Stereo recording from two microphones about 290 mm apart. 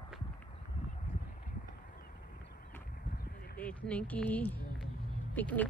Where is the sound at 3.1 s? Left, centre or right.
Left.